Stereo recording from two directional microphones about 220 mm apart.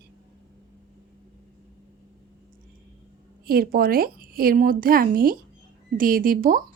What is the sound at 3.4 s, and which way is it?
A woman's voice, 40° right (ahead or behind).